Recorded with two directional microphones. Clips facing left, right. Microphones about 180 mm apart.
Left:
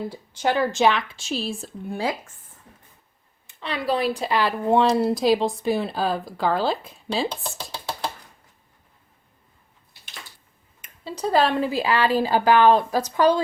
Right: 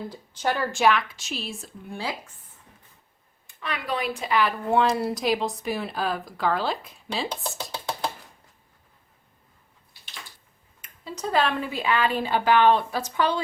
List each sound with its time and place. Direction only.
0.1 s speech: 10° left (ahead or behind); by 2.3 s 45° left (ahead or behind)
3.4 s speech: 30° left (ahead or behind)
7.4 s chopping: 5° left (ahead or behind)
10.8 s a sound: 20° left (ahead or behind)
11.1 s speech: 35° left (ahead or behind)